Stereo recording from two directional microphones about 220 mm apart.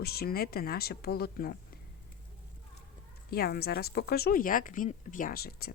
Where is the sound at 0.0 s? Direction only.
45° left (ahead or behind).